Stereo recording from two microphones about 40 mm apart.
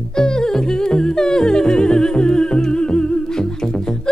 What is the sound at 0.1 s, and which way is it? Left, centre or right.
Music, centre.